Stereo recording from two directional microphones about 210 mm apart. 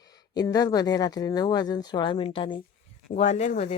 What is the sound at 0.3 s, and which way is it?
Speech, 15° left (ahead or behind).